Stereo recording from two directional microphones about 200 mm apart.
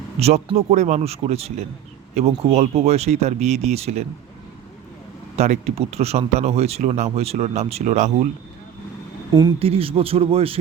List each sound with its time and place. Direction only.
0.2 s speech: 30° right (ahead or behind)
5.4 s speech: 35° right (ahead or behind)
9.6 s speech: 30° right (ahead or behind)